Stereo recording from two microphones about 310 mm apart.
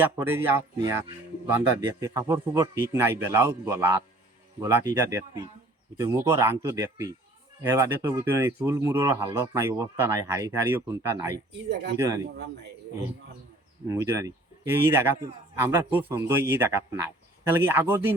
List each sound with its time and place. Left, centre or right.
0.2 s speech: centre
11.5 s speech: right
11.9 s speech: centre
13.8 s speech: centre